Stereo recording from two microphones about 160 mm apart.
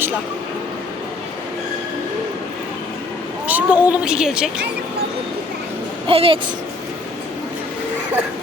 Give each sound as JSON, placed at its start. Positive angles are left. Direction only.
{"t": 3.4, "sound": "speech", "side_deg": -10}
{"t": 6.1, "sound": "speech", "side_deg": -35}